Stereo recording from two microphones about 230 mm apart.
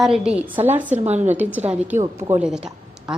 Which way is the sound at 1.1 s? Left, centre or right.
Right.